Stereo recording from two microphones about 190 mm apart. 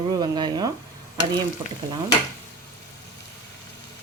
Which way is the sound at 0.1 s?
20° right (ahead or behind).